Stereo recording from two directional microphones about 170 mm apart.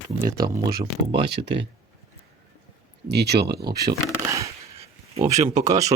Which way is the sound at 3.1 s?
75° right (ahead or behind).